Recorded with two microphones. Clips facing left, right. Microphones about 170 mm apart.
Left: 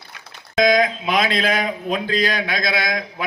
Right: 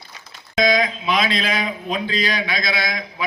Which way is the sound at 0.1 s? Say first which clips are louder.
Left 1 dB; 50° left (ahead or behind).